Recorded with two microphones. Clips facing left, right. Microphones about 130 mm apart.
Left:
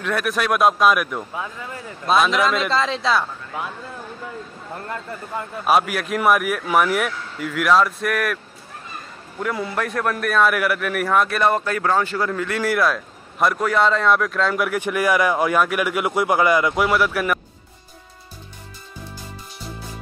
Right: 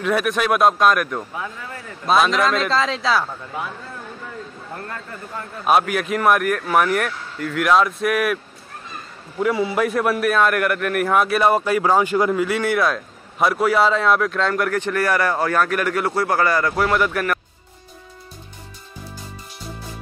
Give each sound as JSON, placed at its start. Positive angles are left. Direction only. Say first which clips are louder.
{"t": 0.0, "sound": "a man's voice", "louder": "right 3 dB", "side_deg": 0}
{"t": 5.7, "sound": "a man's voice", "louder": "right 1 dB", "side_deg": 0}
{"t": 9.4, "sound": "a man's voice", "louder": "right 5 dB", "side_deg": -5}
{"t": 12.5, "sound": "a man's voice", "louder": "even", "side_deg": 0}